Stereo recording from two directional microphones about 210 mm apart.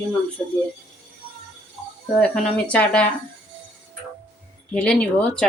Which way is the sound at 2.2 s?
5° left (ahead or behind).